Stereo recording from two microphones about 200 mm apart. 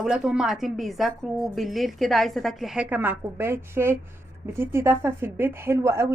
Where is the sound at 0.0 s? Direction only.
5° right (ahead or behind).